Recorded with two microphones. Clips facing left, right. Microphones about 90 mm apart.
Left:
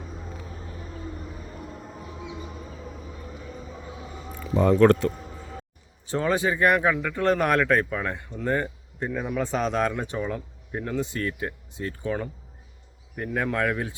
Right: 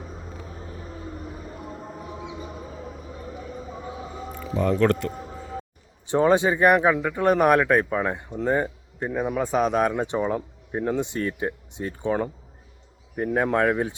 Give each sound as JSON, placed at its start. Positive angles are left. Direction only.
{"t": 4.8, "sound": "speech", "side_deg": 10}
{"t": 6.1, "sound": "speech", "side_deg": -20}